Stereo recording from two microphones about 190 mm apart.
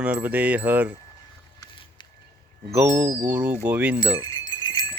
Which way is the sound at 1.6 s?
25° left (ahead or behind).